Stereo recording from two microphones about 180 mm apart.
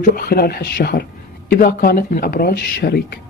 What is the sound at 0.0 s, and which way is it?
Speech, 55° left (ahead or behind).